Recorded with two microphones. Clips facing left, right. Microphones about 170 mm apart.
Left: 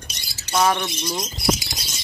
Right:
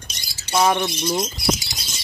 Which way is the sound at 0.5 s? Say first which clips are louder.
Right 2 dB; 15° right (ahead or behind).